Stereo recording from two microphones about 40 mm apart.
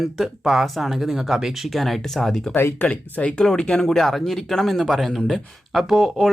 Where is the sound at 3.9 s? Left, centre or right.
Centre.